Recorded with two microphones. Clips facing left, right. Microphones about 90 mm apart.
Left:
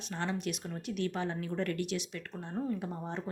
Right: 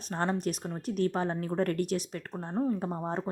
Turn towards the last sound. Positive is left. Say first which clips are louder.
# right 5 dB
turn(degrees=-40)  # may be behind; listen again after turning